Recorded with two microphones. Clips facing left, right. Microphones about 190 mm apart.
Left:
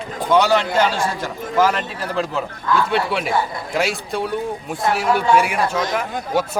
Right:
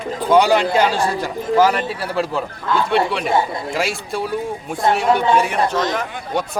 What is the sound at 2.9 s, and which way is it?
Speech, centre (ahead or behind).